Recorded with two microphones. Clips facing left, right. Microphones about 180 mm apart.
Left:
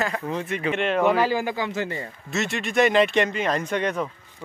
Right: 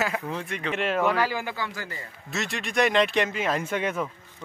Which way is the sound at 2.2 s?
Centre (ahead or behind).